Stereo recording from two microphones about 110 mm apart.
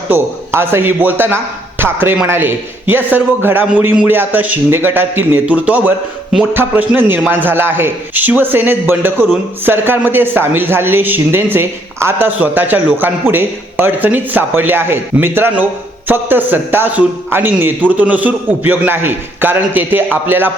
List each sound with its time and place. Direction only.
0.1 s a man's voice: 20° right (ahead or behind)